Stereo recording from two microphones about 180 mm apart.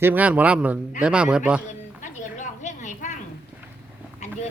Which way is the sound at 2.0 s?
45° left (ahead or behind).